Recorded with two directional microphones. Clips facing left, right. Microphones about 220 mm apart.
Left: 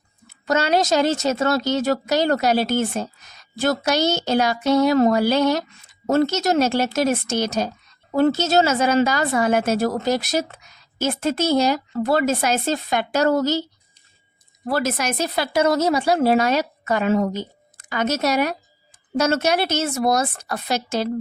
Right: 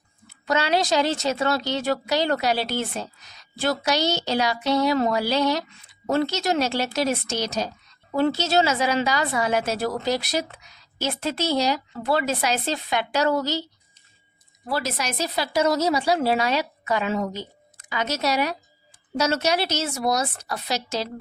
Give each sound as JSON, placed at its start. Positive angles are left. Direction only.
{"t": 0.3, "sound": "a woman's voice", "side_deg": 45}
{"t": 14.7, "sound": "a woman's voice", "side_deg": 50}